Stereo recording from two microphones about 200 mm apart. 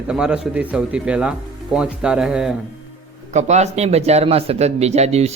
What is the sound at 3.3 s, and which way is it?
Speech, 35° right (ahead or behind).